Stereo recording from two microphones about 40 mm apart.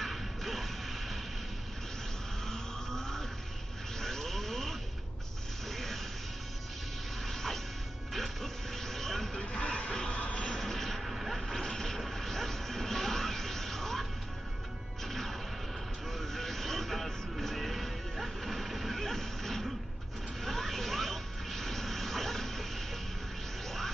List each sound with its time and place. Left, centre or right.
0.0 s music: centre
2.4 s vehicle: centre
7.2 s music: centre
9.4 s music: left
10.1 s vehicle: left
10.4 s vehicle: centre
12.0 s music: centre
15.0 s music: centre
20.4 s a sound: centre